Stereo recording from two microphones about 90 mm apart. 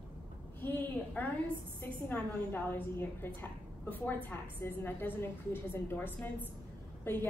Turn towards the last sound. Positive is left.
turn(degrees=25)  # may be behind; listen again after turning